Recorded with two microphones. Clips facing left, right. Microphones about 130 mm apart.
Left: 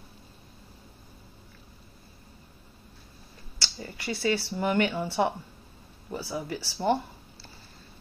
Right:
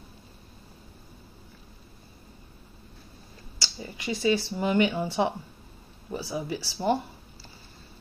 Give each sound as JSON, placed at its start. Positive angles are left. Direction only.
{"t": 3.5, "sound": "speech", "side_deg": -15}